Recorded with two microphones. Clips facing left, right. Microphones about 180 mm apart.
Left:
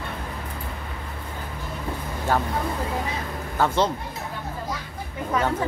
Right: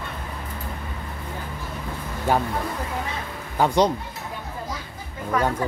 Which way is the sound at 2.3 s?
15° right (ahead or behind).